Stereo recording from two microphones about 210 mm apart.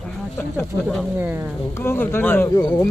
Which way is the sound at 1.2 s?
10° right (ahead or behind).